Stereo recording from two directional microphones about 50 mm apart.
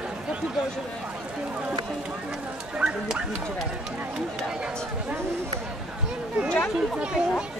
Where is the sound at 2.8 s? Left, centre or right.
Right.